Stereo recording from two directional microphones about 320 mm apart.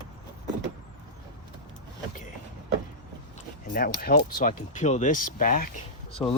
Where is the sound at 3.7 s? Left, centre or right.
Left.